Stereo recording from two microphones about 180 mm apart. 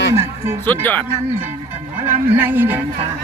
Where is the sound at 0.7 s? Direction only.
10° left (ahead or behind).